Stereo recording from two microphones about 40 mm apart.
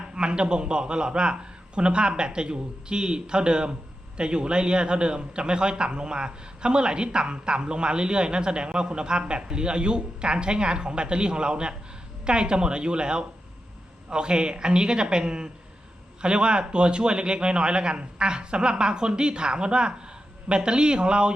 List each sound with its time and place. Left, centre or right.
0.2 s a man's voice: right